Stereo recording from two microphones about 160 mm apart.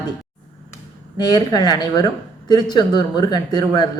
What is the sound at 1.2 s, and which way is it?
Speech, 25° left (ahead or behind).